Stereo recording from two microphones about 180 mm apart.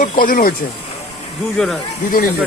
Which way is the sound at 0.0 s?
50° left (ahead or behind).